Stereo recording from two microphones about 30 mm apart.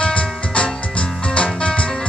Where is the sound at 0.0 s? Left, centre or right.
Left.